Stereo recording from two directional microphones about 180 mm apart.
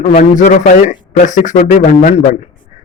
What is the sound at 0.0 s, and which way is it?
A man's voice, 40° left (ahead or behind).